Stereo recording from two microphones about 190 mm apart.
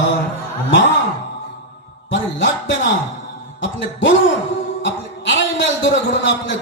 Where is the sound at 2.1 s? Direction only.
75° left (ahead or behind).